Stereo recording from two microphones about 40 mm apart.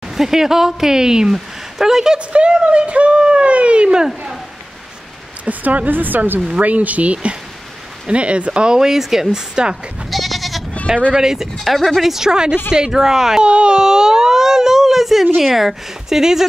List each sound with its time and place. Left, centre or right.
0.1 s speech: centre
2.1 s speech: right
5.4 s speech: right
6.6 s speech: right; by 9.4 s centre
10.0 s goat: centre
11.1 s speech: centre
11.6 s speech: centre
13.4 s speech: right